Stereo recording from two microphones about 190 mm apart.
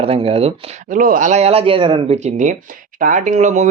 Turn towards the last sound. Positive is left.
turn(degrees=-40)  # may be behind; listen again after turning